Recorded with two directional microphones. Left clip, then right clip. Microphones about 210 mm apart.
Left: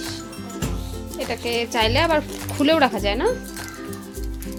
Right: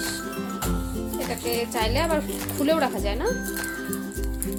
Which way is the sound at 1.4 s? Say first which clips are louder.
Left 6 dB; 50° left (ahead or behind).